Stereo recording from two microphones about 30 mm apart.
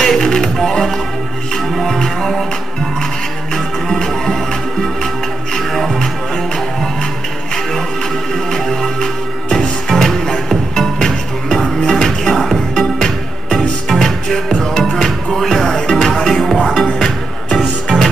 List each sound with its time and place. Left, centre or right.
0.0 s music: centre
3.5 s music: centre
8.5 s music: centre